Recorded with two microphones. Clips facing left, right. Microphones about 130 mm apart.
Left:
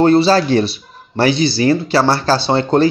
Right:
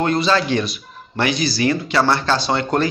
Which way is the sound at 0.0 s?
35° left (ahead or behind).